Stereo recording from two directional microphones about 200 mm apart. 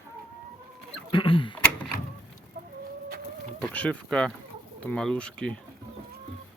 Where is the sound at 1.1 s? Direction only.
25° left (ahead or behind).